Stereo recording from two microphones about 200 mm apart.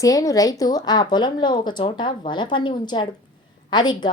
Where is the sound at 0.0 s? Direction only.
15° left (ahead or behind).